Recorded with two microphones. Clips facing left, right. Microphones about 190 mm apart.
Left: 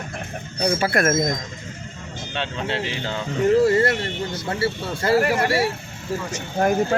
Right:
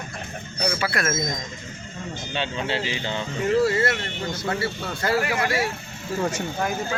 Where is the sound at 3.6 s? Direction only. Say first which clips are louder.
Left 4 dB; 40° left (ahead or behind).